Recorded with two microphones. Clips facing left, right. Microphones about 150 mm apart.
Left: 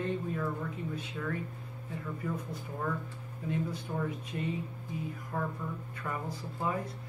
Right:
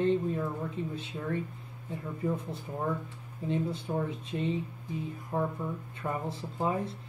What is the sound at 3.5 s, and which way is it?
Speech, 25° right (ahead or behind).